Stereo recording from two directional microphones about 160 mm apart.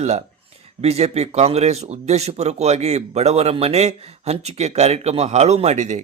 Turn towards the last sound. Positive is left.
turn(degrees=-45)  # may be behind; listen again after turning